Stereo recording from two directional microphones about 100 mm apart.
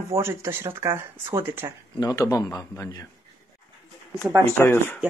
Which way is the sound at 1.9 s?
35° left (ahead or behind).